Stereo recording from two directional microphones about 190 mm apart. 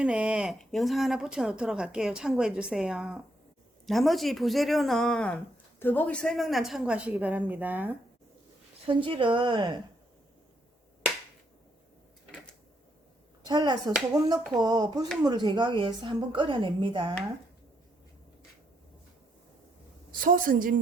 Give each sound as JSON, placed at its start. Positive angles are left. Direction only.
{"t": 0.0, "sound": "speech", "side_deg": -5}
{"t": 8.9, "sound": "a woman's voice", "side_deg": -25}
{"t": 13.4, "sound": "a woman's voice", "side_deg": -20}
{"t": 20.1, "sound": "a woman's voice", "side_deg": -45}